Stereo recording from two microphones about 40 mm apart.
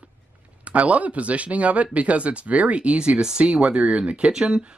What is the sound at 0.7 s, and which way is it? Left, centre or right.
Speech, right.